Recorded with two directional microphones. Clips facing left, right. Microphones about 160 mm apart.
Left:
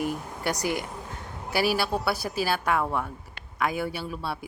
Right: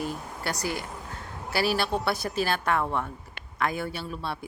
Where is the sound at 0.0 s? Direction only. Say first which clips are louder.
Left 3 dB; 15° left (ahead or behind).